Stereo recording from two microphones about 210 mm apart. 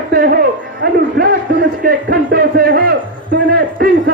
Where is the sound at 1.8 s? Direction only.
45° right (ahead or behind).